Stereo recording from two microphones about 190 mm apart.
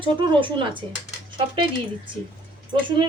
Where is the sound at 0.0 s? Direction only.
25° right (ahead or behind).